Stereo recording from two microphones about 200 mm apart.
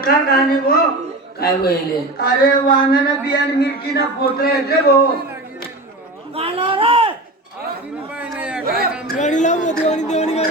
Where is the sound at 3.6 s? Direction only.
55° left (ahead or behind).